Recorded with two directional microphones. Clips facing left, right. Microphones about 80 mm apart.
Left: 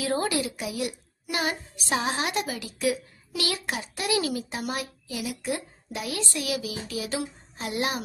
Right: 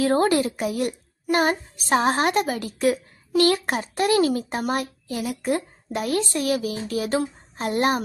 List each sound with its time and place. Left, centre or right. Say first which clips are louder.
0.0 s a woman's voice: right 7 dB; right